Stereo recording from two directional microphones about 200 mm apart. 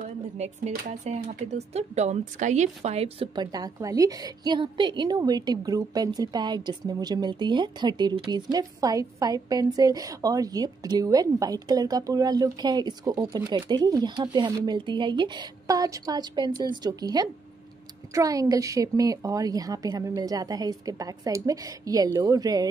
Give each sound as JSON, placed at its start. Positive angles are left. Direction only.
{"t": 0.0, "sound": "a woman's voice", "side_deg": -35}